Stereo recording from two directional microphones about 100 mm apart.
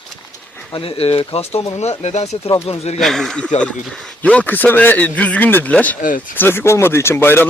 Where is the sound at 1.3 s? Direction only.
85° left.